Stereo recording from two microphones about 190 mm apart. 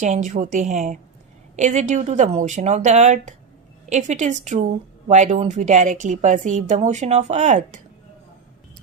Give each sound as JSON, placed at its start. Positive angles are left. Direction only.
{"t": 0.0, "sound": "a woman's voice", "side_deg": -40}